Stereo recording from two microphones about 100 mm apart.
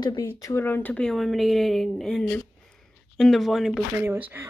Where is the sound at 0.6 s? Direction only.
20° left (ahead or behind).